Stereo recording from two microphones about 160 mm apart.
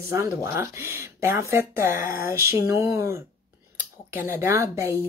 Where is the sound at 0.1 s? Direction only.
15° right (ahead or behind).